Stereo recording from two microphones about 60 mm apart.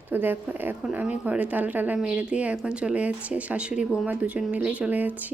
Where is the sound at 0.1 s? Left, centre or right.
Right.